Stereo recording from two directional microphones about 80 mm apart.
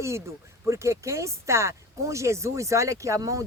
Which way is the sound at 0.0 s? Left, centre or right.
Right.